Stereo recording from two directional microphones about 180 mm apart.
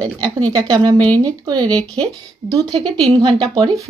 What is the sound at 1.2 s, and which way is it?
Speech, 20° right (ahead or behind).